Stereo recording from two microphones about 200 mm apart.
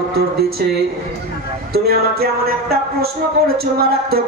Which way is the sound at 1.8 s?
50° right (ahead or behind).